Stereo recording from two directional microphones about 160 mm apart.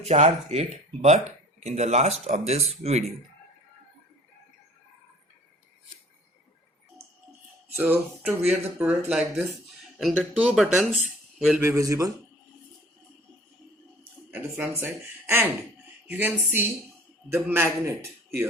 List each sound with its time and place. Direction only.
0.0 s speech: 45° right (ahead or behind)
7.8 s a man's voice: 10° right (ahead or behind)
11.6 s a man's voice: 20° right (ahead or behind)
14.3 s speech: 5° right (ahead or behind)
14.8 s a man's voice: 15° right (ahead or behind)